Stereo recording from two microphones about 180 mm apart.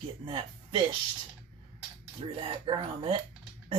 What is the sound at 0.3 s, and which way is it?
Speech, 25° right (ahead or behind).